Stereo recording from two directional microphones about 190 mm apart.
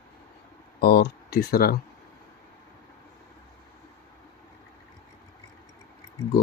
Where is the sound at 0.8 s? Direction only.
55° left (ahead or behind).